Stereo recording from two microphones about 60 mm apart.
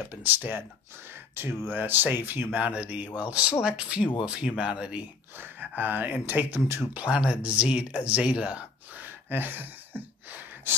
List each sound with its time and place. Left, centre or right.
0.1 s speech: right
2.6 s speech: right
5.4 s speech: right
6.9 s speech: centre
9.0 s a sound: right